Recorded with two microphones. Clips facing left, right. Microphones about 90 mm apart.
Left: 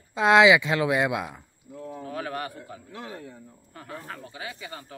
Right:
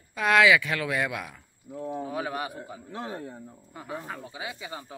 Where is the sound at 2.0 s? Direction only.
10° right (ahead or behind).